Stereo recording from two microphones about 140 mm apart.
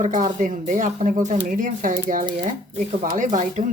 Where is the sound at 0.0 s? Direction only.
70° right (ahead or behind).